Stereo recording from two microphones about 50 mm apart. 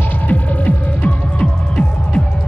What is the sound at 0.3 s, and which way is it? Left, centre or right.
Music, left.